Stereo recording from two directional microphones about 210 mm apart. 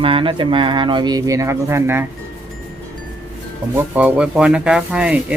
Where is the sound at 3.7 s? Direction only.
5° right (ahead or behind).